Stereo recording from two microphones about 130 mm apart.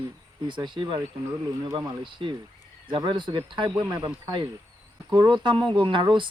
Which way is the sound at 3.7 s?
25° right (ahead or behind).